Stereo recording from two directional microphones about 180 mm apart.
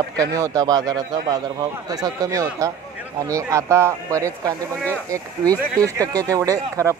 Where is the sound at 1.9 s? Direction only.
20° right (ahead or behind).